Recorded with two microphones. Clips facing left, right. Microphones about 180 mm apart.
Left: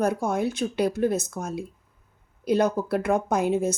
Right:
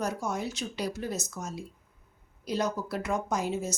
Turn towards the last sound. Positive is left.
turn(degrees=55)  # may be behind; listen again after turning